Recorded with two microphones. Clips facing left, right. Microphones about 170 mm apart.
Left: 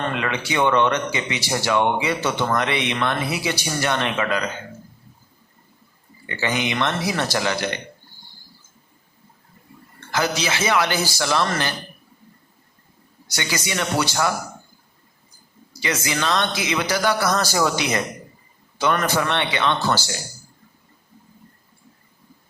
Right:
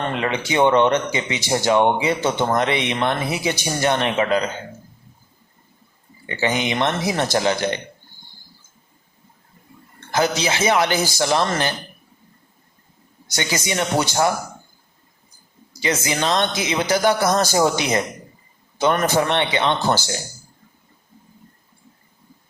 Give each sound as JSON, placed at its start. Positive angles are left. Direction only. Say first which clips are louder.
{"t": 0.0, "sound": "speech", "louder": "right 2 dB", "side_deg": -20}
{"t": 6.2, "sound": "speech", "louder": "right 2 dB", "side_deg": -20}
{"t": 10.1, "sound": "speech", "louder": "right 3 dB", "side_deg": -20}
{"t": 13.3, "sound": "speech", "louder": "right 3 dB", "side_deg": -20}
{"t": 15.8, "sound": "speech", "louder": "right 3 dB", "side_deg": -20}